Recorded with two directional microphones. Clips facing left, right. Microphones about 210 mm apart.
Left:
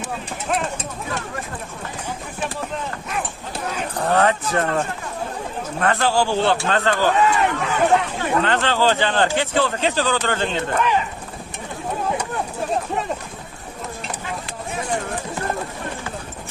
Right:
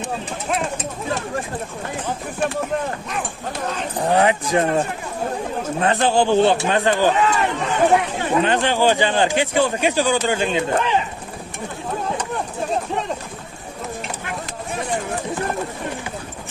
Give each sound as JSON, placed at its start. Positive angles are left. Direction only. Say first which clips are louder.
{"t": 4.0, "sound": "a man's voice", "louder": "right 1 dB", "side_deg": -15}